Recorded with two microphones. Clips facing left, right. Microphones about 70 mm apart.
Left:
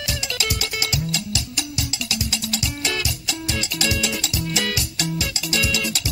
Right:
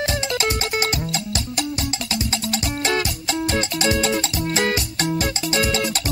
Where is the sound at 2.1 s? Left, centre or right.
Right.